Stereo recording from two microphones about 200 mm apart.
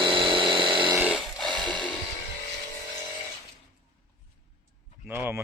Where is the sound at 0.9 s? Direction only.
10° right (ahead or behind).